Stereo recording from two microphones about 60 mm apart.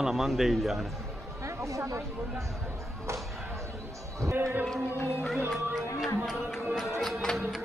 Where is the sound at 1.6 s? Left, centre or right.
Right.